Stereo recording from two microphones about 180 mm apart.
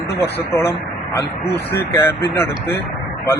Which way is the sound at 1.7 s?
15° left (ahead or behind).